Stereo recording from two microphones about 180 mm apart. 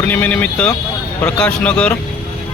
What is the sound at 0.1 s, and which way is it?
Speech, 10° left (ahead or behind).